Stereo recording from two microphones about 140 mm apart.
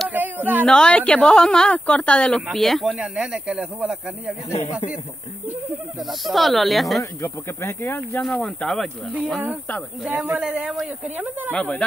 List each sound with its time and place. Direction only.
0.1 s a sound: 15° right (ahead or behind)
0.7 s speech: 5° left (ahead or behind)
4.5 s speech: 20° left (ahead or behind)
5.9 s speech: centre (ahead or behind)
7.0 s speech: 20° left (ahead or behind)
8.2 s speech: 5° left (ahead or behind)
10.0 s a man's voice: 15° right (ahead or behind)
11.5 s speech: 10° left (ahead or behind)